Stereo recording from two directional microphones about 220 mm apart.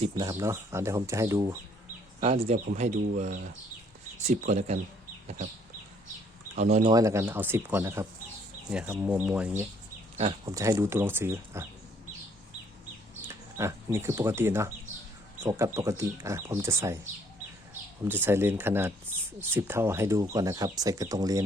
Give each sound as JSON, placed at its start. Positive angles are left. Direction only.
{"t": 0.0, "sound": "speech", "side_deg": -20}
{"t": 2.2, "sound": "speech", "side_deg": -30}
{"t": 6.6, "sound": "speech", "side_deg": -30}
{"t": 6.9, "sound": "speech", "side_deg": -15}
{"t": 10.2, "sound": "speech", "side_deg": -25}
{"t": 10.5, "sound": "speech", "side_deg": -15}
{"t": 13.2, "sound": "speech", "side_deg": -10}
{"t": 18.1, "sound": "speech", "side_deg": -10}